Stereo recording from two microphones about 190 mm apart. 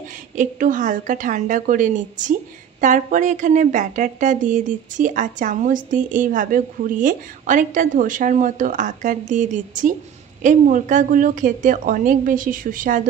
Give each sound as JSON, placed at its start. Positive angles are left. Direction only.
{"t": 0.4, "sound": "a woman's voice", "side_deg": -40}